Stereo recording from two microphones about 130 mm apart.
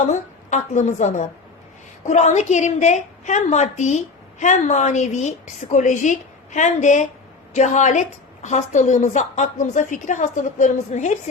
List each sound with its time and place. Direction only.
0.0 s a woman's voice: 65° left (ahead or behind)